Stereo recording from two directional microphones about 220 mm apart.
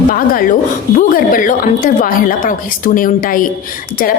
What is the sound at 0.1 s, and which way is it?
A woman's voice, 40° left (ahead or behind).